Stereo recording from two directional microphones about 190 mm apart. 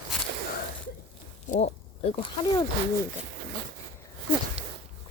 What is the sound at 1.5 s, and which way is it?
Speech, 40° left (ahead or behind).